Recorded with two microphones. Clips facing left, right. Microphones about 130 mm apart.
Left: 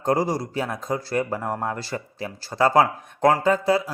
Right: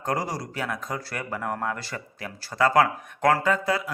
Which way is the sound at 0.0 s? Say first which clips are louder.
Left 6 dB; 25° left (ahead or behind).